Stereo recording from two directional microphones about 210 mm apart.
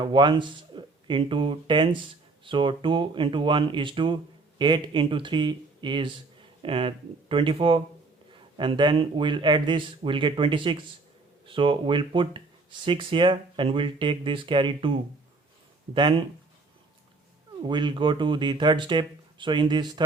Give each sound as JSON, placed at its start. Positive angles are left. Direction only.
{"t": 0.0, "sound": "speech", "side_deg": -20}
{"t": 16.0, "sound": "speech", "side_deg": -20}
{"t": 17.6, "sound": "speech", "side_deg": -20}